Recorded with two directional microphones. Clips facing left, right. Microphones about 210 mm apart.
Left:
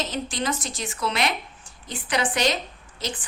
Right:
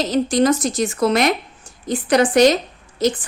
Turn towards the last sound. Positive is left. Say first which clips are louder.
# right 14 dB
turn(degrees=-45)  # may be behind; listen again after turning